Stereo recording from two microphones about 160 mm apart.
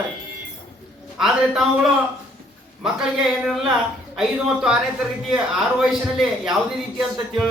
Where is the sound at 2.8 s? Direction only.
5° right (ahead or behind).